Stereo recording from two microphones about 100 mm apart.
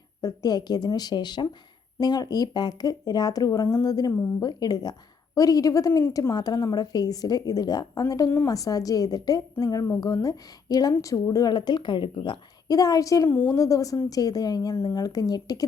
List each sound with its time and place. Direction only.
0.2 s speech: 40° left (ahead or behind)
6.3 s speech: 45° left (ahead or behind)
13.2 s a woman's voice: 20° left (ahead or behind)
13.6 s speech: 35° left (ahead or behind)